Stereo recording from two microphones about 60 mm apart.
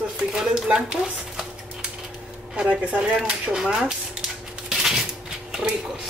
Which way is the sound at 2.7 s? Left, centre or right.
Right.